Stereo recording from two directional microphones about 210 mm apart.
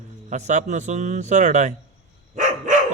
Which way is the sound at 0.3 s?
35° right (ahead or behind).